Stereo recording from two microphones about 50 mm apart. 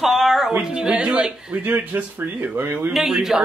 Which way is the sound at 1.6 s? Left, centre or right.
Right.